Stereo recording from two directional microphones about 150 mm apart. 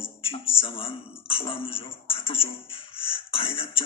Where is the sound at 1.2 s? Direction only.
35° left (ahead or behind).